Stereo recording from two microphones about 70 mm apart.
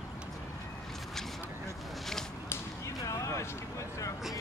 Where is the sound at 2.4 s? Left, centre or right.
Left.